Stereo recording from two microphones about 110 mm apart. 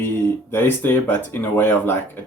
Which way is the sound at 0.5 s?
20° left (ahead or behind).